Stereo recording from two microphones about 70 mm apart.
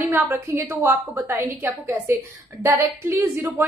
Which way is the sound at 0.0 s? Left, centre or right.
Right.